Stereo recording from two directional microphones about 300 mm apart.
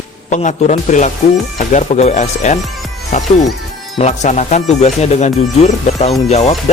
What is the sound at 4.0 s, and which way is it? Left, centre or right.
Speech, left.